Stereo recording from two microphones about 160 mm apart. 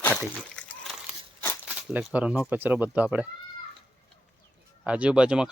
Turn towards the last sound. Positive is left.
turn(degrees=-5)  # may be behind; listen again after turning